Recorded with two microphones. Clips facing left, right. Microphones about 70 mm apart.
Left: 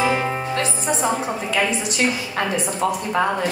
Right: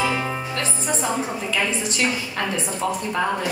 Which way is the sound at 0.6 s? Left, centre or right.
Centre.